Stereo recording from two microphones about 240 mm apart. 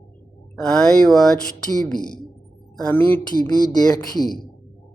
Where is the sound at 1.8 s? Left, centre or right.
Centre.